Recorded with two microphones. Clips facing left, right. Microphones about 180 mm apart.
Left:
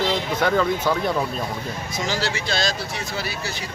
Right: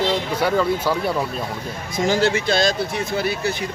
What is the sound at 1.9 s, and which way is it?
Speech, 50° right (ahead or behind).